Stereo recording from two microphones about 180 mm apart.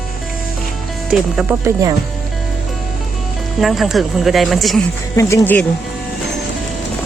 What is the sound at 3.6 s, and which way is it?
Speech, centre (ahead or behind).